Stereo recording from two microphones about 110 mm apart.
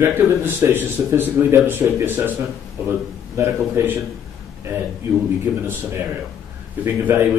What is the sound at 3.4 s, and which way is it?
Speech, 25° right (ahead or behind).